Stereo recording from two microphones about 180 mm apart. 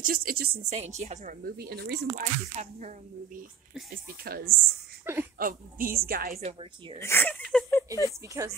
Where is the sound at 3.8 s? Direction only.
55° right (ahead or behind).